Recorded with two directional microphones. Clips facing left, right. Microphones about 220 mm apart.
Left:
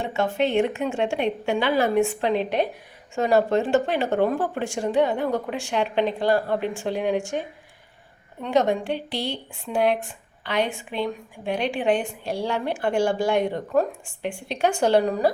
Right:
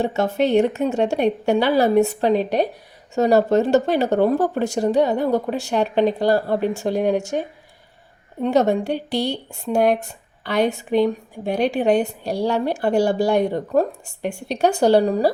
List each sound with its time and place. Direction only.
0.0 s speech: 40° right (ahead or behind)